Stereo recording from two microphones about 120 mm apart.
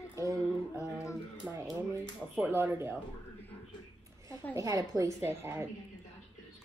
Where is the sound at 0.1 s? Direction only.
25° right (ahead or behind).